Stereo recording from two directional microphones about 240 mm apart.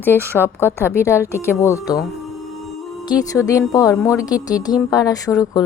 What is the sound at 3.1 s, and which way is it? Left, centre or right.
Speech, centre.